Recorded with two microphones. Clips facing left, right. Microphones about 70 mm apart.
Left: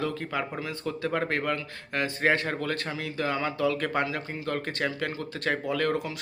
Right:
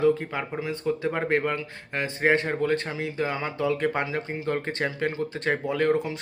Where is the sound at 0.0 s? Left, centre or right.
Right.